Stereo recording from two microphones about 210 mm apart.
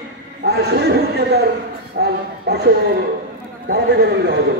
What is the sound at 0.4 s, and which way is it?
Speech, 50° right (ahead or behind).